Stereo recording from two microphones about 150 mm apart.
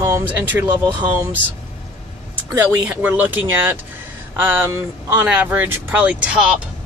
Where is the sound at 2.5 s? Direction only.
10° right (ahead or behind).